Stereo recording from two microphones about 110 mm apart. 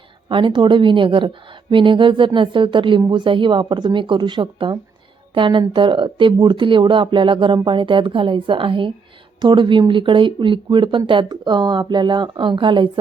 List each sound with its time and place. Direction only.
0.3 s speech: 50° right (ahead or behind)